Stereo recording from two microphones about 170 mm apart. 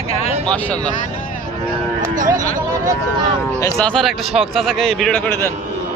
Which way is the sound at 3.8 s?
5° left (ahead or behind).